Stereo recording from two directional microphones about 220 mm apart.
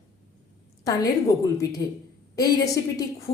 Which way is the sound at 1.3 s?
15° left (ahead or behind).